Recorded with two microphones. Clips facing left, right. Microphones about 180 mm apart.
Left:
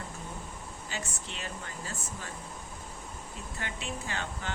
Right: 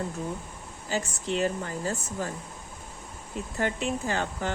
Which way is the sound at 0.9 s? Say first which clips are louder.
Right 12 dB; 40° right (ahead or behind).